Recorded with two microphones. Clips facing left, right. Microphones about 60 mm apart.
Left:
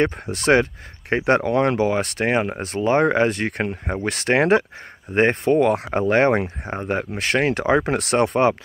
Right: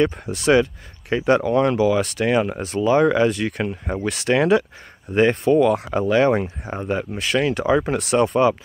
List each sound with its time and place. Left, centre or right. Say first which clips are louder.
0.0 s speech: right 1 dB; left